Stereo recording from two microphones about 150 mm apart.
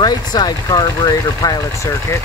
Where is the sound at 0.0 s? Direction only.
25° left (ahead or behind).